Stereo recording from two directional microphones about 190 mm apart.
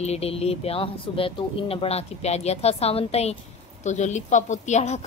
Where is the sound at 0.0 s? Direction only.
35° left (ahead or behind).